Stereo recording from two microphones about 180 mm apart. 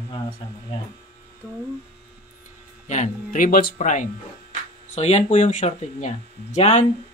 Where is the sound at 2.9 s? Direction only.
45° left (ahead or behind).